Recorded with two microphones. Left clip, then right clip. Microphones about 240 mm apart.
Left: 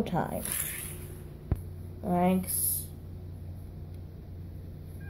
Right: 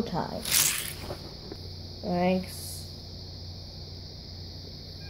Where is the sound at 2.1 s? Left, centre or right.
Centre.